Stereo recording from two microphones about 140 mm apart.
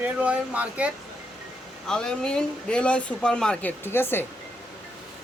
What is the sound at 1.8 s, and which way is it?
Speech, 5° left (ahead or behind).